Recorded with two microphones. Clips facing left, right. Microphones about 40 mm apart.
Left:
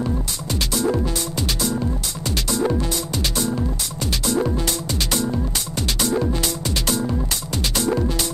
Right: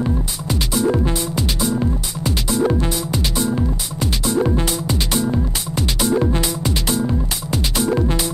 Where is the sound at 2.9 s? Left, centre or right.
Centre.